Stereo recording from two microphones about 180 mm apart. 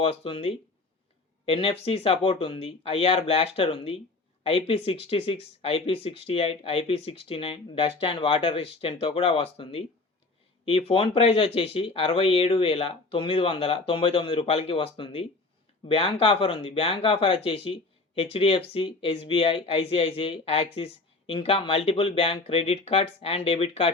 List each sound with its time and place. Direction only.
0.0 s speech: 30° left (ahead or behind)